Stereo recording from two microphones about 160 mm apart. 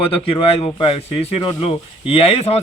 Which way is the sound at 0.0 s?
35° left (ahead or behind).